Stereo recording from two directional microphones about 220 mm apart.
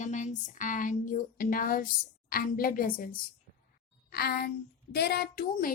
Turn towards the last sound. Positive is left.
turn(degrees=45)  # may be behind; listen again after turning